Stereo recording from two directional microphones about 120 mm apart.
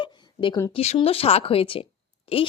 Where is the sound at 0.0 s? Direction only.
45° left (ahead or behind).